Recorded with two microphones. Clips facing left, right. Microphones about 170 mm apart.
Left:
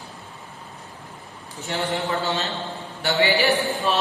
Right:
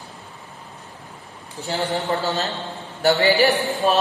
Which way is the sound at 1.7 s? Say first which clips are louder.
Right 2 dB; 35° right (ahead or behind).